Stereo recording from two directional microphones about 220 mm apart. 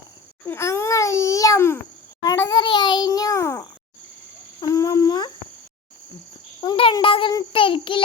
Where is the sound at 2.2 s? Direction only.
15° left (ahead or behind).